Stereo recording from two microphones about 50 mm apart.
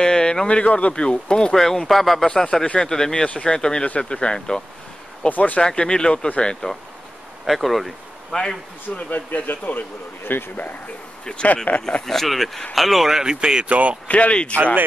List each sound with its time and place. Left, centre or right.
0.0 s speech: centre
5.3 s speech: left
5.6 s speech: centre
7.4 s speech: centre
8.9 s speech: left
12.1 s speech: centre
14.0 s speech: left